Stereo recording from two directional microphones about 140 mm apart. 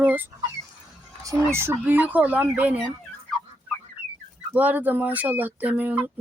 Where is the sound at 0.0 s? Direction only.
10° right (ahead or behind).